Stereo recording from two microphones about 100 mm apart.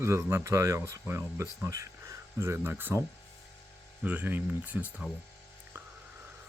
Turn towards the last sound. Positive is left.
turn(degrees=-15)  # may be behind; listen again after turning